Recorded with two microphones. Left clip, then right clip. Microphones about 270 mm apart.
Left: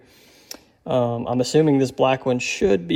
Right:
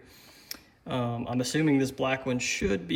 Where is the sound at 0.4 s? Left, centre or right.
Centre.